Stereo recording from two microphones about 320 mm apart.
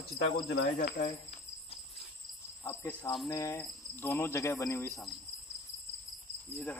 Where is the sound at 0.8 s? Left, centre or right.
Left.